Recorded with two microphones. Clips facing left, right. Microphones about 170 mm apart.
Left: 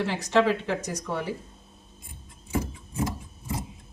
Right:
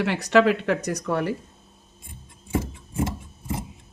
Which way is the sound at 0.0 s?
70° right (ahead or behind).